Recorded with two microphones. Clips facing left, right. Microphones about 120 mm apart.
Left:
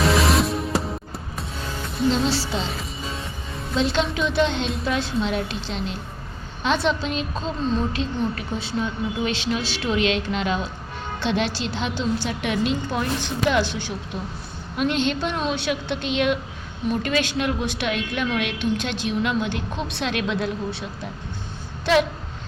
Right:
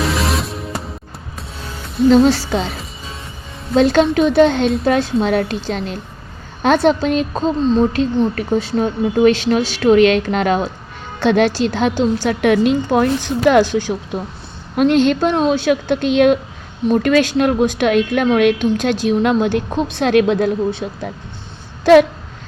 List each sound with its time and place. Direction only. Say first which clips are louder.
0.0 s music: even; centre (ahead or behind)
2.0 s a woman's voice: right 11 dB; 50° right (ahead or behind)
3.8 s a woman's voice: right 10 dB; 55° right (ahead or behind)
7.6 s speech: right 9 dB; 30° right (ahead or behind)
8.4 s a woman's voice: right 10 dB; 45° right (ahead or behind)
12.3 s a woman's voice: right 10 dB; 55° right (ahead or behind)